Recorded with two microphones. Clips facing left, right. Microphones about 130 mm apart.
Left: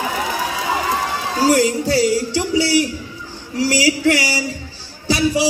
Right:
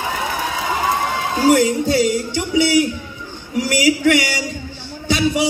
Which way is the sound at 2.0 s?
35° left (ahead or behind).